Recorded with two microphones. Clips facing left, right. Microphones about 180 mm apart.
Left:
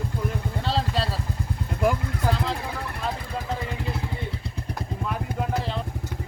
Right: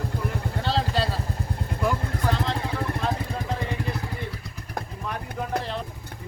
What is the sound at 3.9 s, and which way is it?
Vehicle, 25° left (ahead or behind).